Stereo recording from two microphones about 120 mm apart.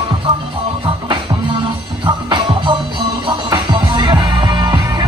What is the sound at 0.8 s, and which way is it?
Music, 45° right (ahead or behind).